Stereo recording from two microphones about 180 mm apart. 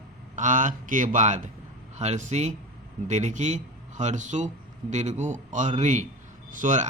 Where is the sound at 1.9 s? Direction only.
40° right (ahead or behind).